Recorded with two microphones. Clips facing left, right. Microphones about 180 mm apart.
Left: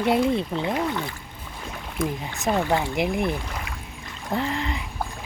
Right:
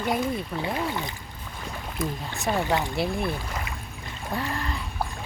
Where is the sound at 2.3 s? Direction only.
20° left (ahead or behind).